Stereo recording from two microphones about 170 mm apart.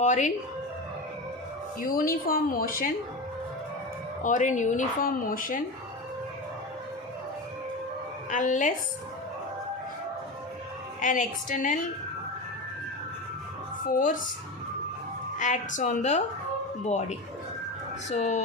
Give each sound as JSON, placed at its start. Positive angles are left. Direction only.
{"t": 0.0, "sound": "speech", "side_deg": 45}
{"t": 1.9, "sound": "a woman's voice", "side_deg": 55}
{"t": 4.2, "sound": "speech", "side_deg": 50}
{"t": 8.3, "sound": "speech", "side_deg": 50}
{"t": 11.0, "sound": "speech", "side_deg": 50}
{"t": 13.9, "sound": "speech", "side_deg": 50}
{"t": 15.4, "sound": "speech", "side_deg": 45}